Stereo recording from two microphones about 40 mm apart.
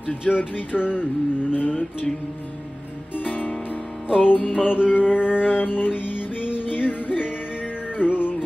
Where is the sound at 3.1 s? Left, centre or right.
Left.